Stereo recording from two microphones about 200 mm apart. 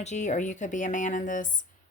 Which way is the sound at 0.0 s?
35° left (ahead or behind).